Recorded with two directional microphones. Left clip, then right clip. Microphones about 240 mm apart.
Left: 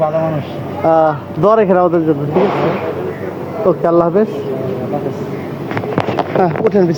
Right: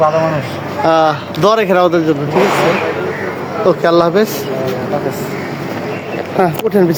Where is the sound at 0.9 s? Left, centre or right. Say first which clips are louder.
Even; centre.